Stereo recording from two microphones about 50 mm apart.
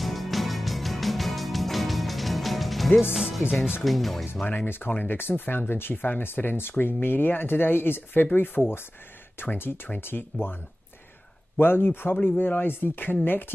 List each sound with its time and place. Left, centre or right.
0.0 s music: centre
3.4 s speech: left
3.8 s speech: centre
4.5 s speech: left